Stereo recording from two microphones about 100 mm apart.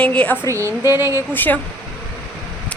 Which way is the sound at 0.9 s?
30° right (ahead or behind).